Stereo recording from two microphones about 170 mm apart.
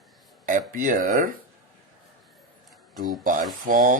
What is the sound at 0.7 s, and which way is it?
Speech, 50° right (ahead or behind).